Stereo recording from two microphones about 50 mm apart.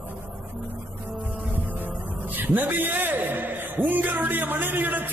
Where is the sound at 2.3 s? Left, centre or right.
Right.